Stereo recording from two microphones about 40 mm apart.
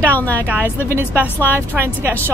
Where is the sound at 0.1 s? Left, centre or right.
Left.